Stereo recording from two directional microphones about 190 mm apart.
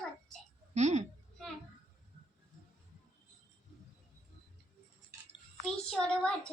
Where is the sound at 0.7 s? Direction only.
35° right (ahead or behind).